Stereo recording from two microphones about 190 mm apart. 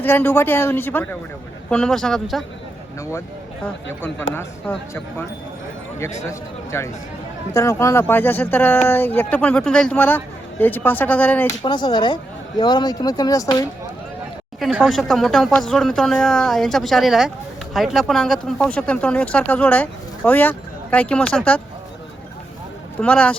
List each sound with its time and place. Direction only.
0.0 s speech: 10° left (ahead or behind)
3.0 s speech: 15° left (ahead or behind)
4.4 s speech: 10° left (ahead or behind)
6.2 s speech: 15° left (ahead or behind)
11.6 s speech: 25° left (ahead or behind)
14.6 s speech: centre (ahead or behind)
23.0 s speech: 5° left (ahead or behind)